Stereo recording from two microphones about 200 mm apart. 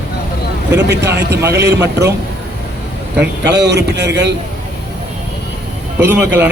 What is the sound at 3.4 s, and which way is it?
Speech, 60° right (ahead or behind).